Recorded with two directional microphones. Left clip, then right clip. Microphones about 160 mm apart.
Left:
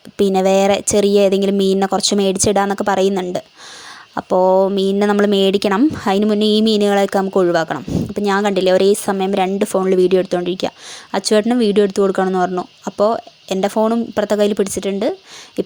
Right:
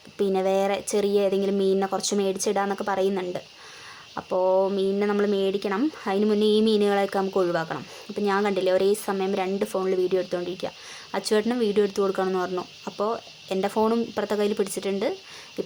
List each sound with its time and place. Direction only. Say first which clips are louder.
0.2 s speech: left 9 dB; 45° left (ahead or behind)